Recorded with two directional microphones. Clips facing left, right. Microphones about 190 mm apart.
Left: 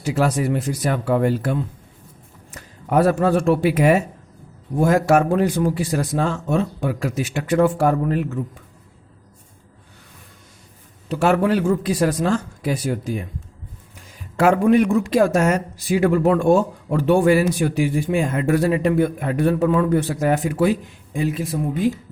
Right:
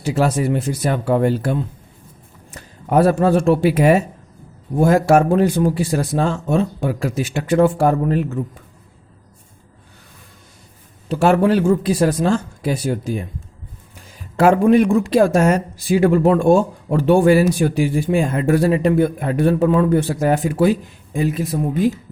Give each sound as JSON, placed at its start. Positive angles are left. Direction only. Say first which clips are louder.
{"t": 0.0, "sound": "speech", "louder": "right 2 dB", "side_deg": -25}
{"t": 11.1, "sound": "speech", "louder": "right 3 dB", "side_deg": -30}
{"t": 14.3, "sound": "speech", "louder": "right 2 dB", "side_deg": -30}